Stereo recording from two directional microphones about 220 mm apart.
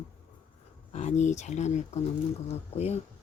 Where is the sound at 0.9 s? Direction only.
30° left (ahead or behind).